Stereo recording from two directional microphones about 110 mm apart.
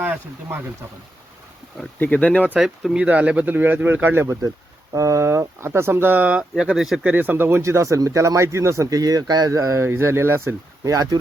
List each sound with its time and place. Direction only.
0.0 s speech: 20° right (ahead or behind)
2.0 s speech: 15° left (ahead or behind)
2.4 s speech: 10° right (ahead or behind)
7.1 s speech: 15° right (ahead or behind); by 11.2 s 30° right (ahead or behind)